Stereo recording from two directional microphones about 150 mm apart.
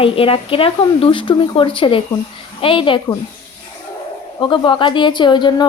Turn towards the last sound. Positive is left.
turn(degrees=30)  # may be behind; listen again after turning